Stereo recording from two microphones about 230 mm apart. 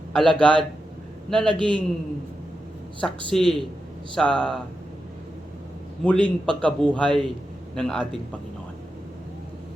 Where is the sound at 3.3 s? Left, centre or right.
Centre.